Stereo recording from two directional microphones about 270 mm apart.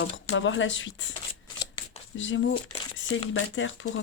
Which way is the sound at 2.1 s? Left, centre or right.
Left.